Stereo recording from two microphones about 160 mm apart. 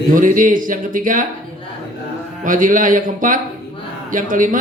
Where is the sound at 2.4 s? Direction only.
55° right (ahead or behind).